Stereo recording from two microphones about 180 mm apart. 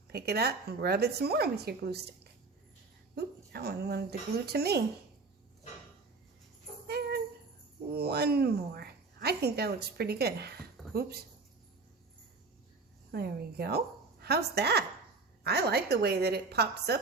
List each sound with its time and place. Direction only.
0.1 s a woman's voice: 60° right (ahead or behind)
3.2 s a woman's voice: 60° right (ahead or behind)
6.8 s music: 65° right (ahead or behind)
7.9 s a woman's voice: 60° right (ahead or behind)
13.1 s a woman's voice: 60° right (ahead or behind)